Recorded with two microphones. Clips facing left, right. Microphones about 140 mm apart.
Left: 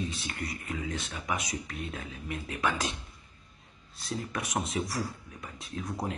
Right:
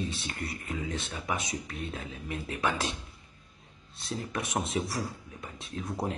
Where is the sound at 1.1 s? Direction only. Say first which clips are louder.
Even; 25° right (ahead or behind).